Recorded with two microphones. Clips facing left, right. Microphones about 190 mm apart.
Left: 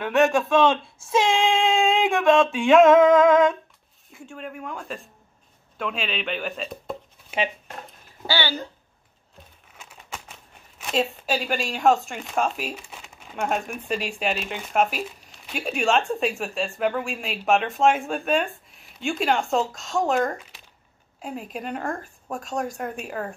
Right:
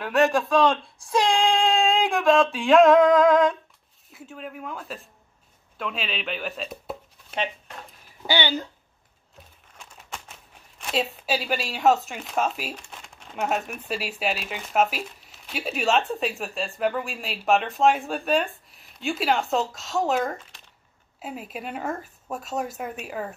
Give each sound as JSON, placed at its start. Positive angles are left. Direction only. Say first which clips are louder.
{"t": 0.0, "sound": "speech", "louder": "left 1 dB", "side_deg": 0}
{"t": 8.3, "sound": "speech", "louder": "right 1 dB", "side_deg": -15}
{"t": 9.7, "sound": "crumpling", "louder": "left 1 dB", "side_deg": 5}
{"t": 13.8, "sound": "speech", "louder": "left 3 dB", "side_deg": -5}